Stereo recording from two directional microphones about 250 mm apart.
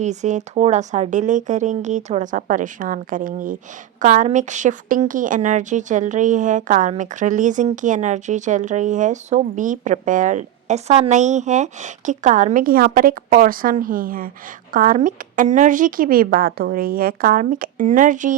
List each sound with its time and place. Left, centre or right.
0.0 s a woman's voice: right